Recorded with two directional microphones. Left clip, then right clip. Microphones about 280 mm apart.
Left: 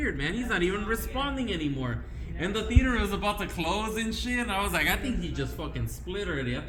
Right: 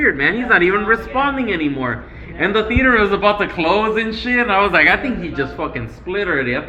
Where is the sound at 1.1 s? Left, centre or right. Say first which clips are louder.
Right 13 dB; left.